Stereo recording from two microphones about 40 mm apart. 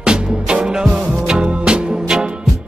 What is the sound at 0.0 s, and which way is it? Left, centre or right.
Music, right.